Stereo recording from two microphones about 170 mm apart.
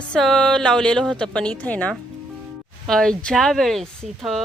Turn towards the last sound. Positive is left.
turn(degrees=0)  # may be behind; listen again after turning